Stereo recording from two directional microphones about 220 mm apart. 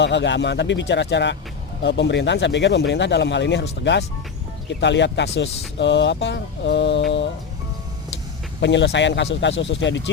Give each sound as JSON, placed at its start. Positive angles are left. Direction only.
{"t": 0.0, "sound": "speech", "side_deg": 55}
{"t": 8.6, "sound": "speech", "side_deg": 55}